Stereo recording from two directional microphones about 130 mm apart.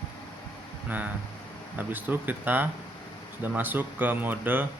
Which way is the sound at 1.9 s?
15° right (ahead or behind).